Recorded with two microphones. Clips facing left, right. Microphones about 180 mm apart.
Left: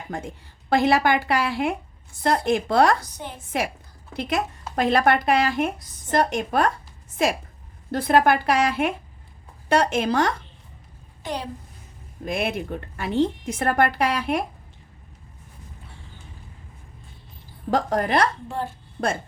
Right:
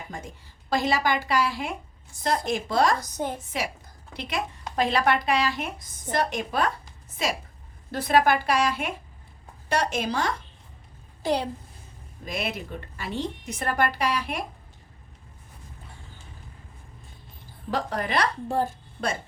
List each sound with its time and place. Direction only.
0.7 s a woman's voice: 60° left (ahead or behind)
3.0 s a woman's voice: 45° right (ahead or behind)
3.5 s a woman's voice: 55° left (ahead or behind)
7.9 s a woman's voice: 55° left (ahead or behind)
11.2 s a child's voice: 35° right (ahead or behind)
12.2 s a woman's voice: 55° left (ahead or behind)
17.7 s a woman's voice: 45° left (ahead or behind)
18.4 s a woman's voice: 40° right (ahead or behind)
19.0 s speech: 40° left (ahead or behind)